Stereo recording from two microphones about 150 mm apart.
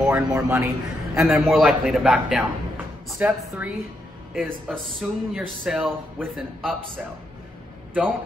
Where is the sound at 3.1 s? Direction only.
15° right (ahead or behind).